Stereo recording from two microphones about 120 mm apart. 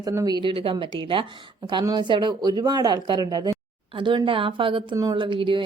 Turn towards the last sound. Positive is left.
turn(degrees=-45)  # may be behind; listen again after turning